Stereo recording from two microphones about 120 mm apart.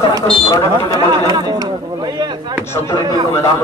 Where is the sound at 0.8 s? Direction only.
35° right (ahead or behind).